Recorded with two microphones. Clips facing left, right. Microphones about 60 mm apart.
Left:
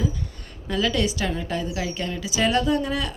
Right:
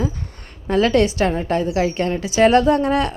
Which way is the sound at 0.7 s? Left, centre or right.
Right.